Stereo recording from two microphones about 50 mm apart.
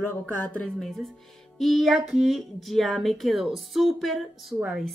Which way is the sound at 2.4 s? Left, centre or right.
Centre.